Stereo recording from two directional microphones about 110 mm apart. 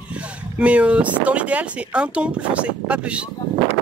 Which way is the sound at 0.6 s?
10° right (ahead or behind).